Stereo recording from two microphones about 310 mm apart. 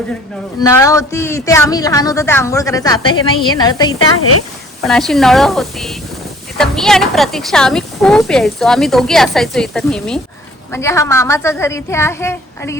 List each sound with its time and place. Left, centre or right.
0.6 s speech: centre
3.9 s speech: left
4.9 s a woman's voice: centre